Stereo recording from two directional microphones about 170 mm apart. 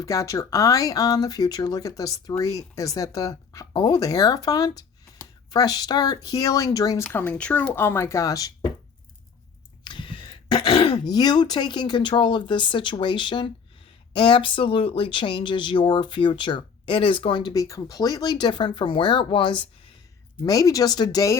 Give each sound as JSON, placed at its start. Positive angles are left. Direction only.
{"t": 0.0, "sound": "speech", "side_deg": 20}
{"t": 9.8, "sound": "throat clearing", "side_deg": 30}
{"t": 11.1, "sound": "speech", "side_deg": 25}